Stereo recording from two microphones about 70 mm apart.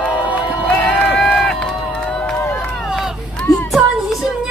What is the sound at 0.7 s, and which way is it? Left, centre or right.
Run, centre.